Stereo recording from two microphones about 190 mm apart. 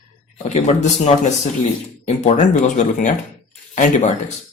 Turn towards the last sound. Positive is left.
turn(degrees=40)  # may be behind; listen again after turning